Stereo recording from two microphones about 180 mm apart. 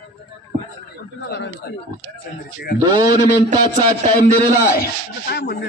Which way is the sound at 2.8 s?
20° right (ahead or behind).